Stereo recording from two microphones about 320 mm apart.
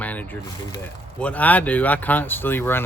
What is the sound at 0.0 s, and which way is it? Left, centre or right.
Speech, centre.